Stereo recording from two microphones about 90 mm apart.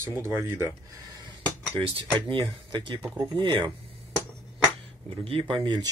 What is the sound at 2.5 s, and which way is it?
Speech, 55° right (ahead or behind).